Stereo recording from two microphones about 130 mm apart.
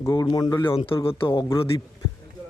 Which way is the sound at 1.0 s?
45° left (ahead or behind).